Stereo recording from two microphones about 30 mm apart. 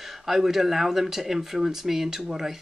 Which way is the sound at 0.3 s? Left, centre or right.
Centre.